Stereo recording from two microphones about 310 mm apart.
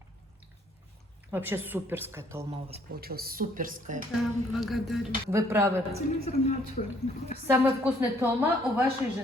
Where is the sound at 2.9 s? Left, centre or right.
Right.